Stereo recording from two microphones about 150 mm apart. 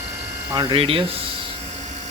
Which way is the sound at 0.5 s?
35° right (ahead or behind).